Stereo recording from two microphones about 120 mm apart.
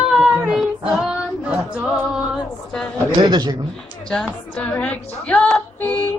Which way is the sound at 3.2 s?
35° right (ahead or behind).